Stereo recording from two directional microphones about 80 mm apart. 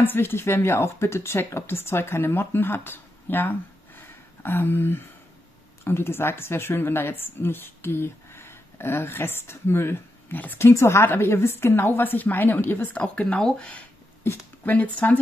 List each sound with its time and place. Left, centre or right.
0.0 s a woman's voice: left
10.7 s a woman's voice: left; by 13.8 s centre
14.2 s speech: left
14.6 s a woman's voice: centre